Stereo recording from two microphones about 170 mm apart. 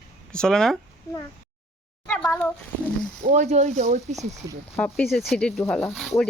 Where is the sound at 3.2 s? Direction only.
45° right (ahead or behind).